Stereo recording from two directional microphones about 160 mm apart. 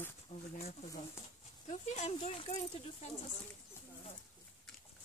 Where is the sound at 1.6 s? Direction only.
45° left (ahead or behind).